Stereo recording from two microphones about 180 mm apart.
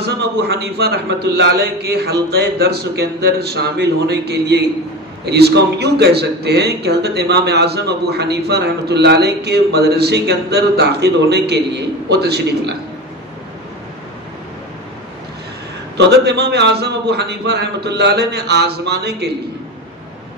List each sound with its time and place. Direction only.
0.0 s a man's voice: 65° right (ahead or behind)
16.0 s a man's voice: 65° right (ahead or behind)